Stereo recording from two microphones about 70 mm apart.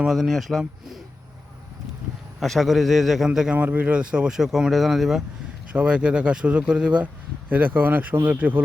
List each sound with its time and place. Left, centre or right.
0.0 s a man's voice: centre
2.4 s a man's voice: centre
3.5 s speech: right; by 5.2 s centre
5.7 s speech: centre